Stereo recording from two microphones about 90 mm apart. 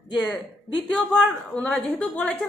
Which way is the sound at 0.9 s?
10° left (ahead or behind).